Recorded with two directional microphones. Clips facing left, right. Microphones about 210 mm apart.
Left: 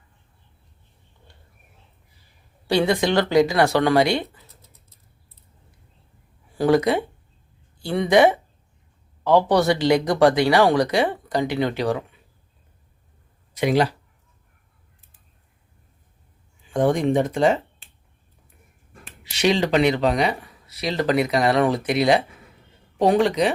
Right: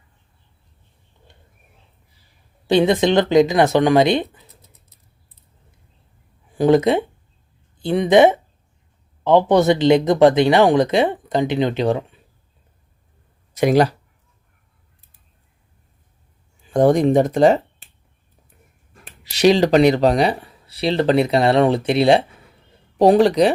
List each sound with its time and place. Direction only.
1.3 s a sound: 20° right (ahead or behind)
2.6 s speech: 20° right (ahead or behind)
6.6 s speech: 20° right (ahead or behind)
13.5 s speech: 45° right (ahead or behind)
16.6 s speech: 40° right (ahead or behind)
19.2 s speech: 40° right (ahead or behind)